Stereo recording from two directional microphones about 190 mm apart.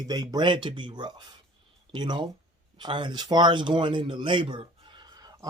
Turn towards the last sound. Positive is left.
turn(degrees=-20)  # may be behind; listen again after turning